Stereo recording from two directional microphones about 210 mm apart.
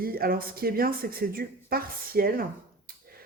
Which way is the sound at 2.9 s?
45° right (ahead or behind).